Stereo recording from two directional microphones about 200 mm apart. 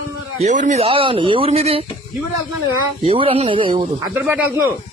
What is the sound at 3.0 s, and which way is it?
Speech, 30° right (ahead or behind).